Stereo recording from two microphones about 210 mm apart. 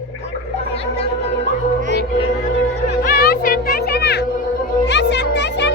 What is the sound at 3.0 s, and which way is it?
Music, 45° left (ahead or behind).